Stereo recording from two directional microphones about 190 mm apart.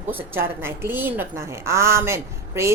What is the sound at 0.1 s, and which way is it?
A woman's voice, 10° right (ahead or behind).